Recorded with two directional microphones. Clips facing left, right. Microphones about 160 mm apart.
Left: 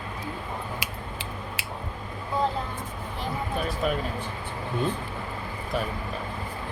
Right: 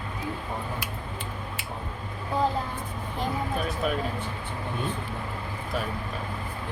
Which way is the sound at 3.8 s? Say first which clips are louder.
Left 1 dB; centre (ahead or behind).